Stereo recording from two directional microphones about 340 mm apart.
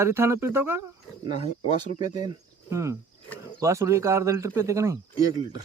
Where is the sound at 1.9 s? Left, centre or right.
Centre.